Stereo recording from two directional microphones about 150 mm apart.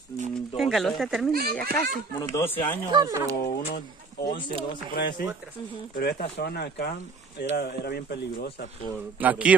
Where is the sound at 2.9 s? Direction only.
25° right (ahead or behind).